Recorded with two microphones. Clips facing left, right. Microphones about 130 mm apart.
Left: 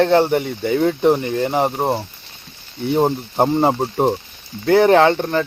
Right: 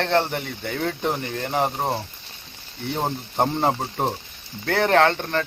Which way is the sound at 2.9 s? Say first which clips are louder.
Left 9 dB; 20° left (ahead or behind).